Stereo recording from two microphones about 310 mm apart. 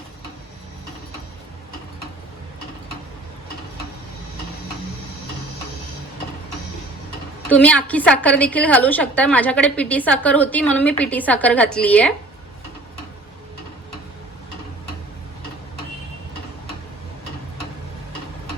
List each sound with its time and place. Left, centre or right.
7.5 s a woman's voice: centre